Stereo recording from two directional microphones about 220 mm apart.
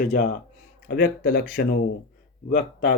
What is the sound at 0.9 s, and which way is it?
Speech, 45° left (ahead or behind).